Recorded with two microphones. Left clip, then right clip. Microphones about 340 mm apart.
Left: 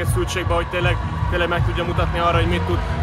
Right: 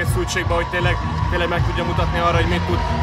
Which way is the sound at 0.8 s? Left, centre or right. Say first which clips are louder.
Right 1 dB; centre.